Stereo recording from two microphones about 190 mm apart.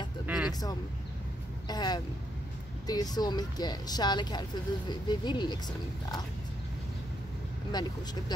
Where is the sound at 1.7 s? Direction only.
20° left (ahead or behind).